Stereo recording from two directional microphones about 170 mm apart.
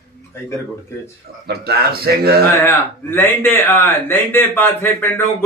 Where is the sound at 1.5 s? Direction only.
65° right (ahead or behind).